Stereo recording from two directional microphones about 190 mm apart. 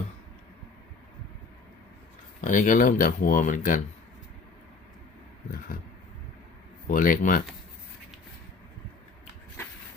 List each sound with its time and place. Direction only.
2.4 s speech: 45° left (ahead or behind)
6.8 s speech: 45° left (ahead or behind)